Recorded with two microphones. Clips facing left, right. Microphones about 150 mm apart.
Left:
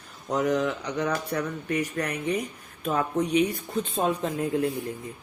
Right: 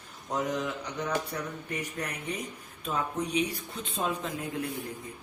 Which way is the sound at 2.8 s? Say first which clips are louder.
Left 6 dB; 55° left (ahead or behind).